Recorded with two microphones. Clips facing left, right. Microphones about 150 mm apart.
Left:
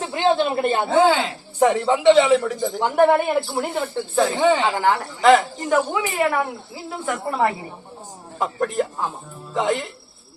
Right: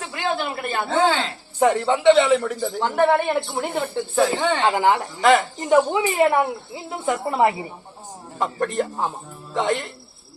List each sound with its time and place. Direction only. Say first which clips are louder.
0.0 s a sound: left 6 dB; 25° left (ahead or behind)
0.9 s a woman's voice: left 2 dB; 10° left (ahead or behind)
1.5 s a man's voice: left 1 dB; centre (ahead or behind)
4.7 s speech: right 1 dB; 20° right (ahead or behind)
5.2 s a man's voice: left 2 dB; centre (ahead or behind)
5.5 s speech: right 3 dB; 20° right (ahead or behind)
8.4 s a man's voice: left 1 dB; centre (ahead or behind)